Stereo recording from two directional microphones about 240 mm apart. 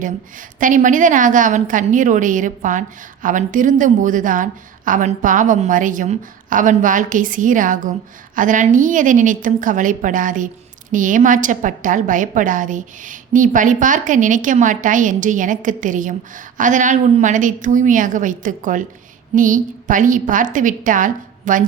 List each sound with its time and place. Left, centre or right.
0.0 s a woman's voice: right